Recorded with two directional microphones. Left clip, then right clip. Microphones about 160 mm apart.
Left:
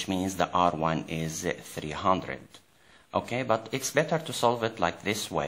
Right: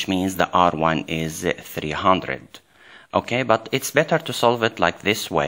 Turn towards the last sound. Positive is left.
turn(degrees=-35)  # may be behind; listen again after turning